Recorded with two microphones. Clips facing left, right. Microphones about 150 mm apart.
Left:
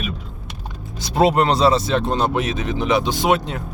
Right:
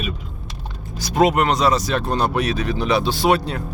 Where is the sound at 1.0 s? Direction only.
30° left (ahead or behind).